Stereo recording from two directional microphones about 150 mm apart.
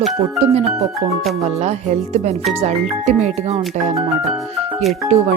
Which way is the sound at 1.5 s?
45° right (ahead or behind).